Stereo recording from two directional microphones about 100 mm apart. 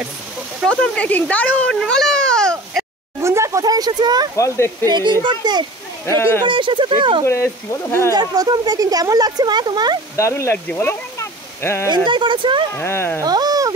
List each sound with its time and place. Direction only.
0.7 s speech: 10° left (ahead or behind)
1.8 s a sound: 5° left (ahead or behind)
3.2 s speech: 30° right (ahead or behind); by 5.7 s 45° right (ahead or behind)
6.0 s speech: 30° left (ahead or behind)
6.4 s speech: 55° right (ahead or behind)
7.2 s speech: 30° left (ahead or behind)
8.1 s speech: 40° right (ahead or behind)
10.1 s speech: 30° left (ahead or behind)
11.9 s speech: 50° right (ahead or behind)
12.7 s speech: 25° left (ahead or behind)
13.2 s sheep: 40° right (ahead or behind)